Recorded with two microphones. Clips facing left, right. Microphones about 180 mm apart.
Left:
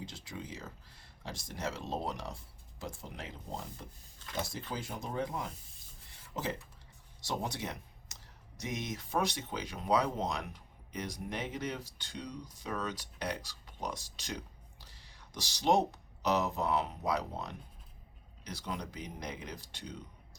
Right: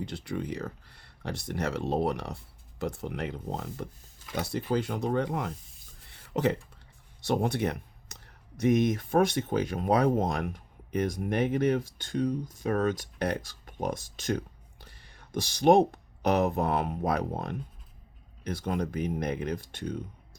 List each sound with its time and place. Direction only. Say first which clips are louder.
0.0 s speech: right 10 dB; 60° right (ahead or behind)